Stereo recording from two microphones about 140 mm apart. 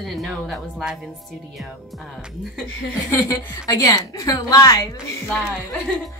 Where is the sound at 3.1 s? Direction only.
25° left (ahead or behind).